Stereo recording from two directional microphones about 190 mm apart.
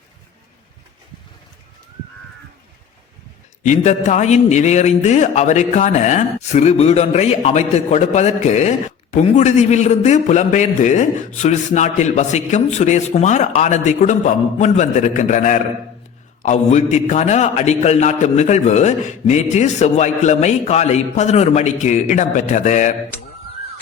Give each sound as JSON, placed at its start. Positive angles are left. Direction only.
{"t": 3.6, "sound": "a man's voice", "side_deg": 40}